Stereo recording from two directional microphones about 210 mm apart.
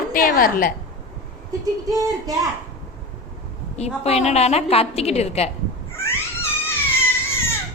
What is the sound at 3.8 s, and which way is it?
A woman's voice, 30° left (ahead or behind).